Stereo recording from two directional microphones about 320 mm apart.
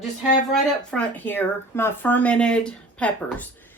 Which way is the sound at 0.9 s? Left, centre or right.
Centre.